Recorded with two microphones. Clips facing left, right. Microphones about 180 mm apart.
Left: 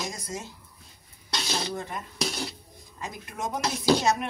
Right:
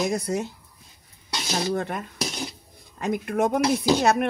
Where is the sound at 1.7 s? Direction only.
65° right (ahead or behind).